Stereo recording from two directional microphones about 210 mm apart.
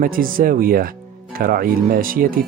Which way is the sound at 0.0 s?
40° right (ahead or behind).